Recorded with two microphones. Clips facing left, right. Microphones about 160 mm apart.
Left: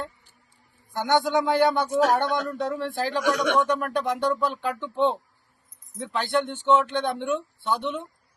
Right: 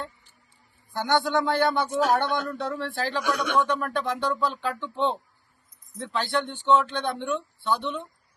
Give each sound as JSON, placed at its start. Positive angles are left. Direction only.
{"t": 0.9, "sound": "speech", "side_deg": 20}
{"t": 1.7, "sound": "speech", "side_deg": 5}
{"t": 2.5, "sound": "speech", "side_deg": 15}
{"t": 3.2, "sound": "speech", "side_deg": 90}
{"t": 3.6, "sound": "speech", "side_deg": 15}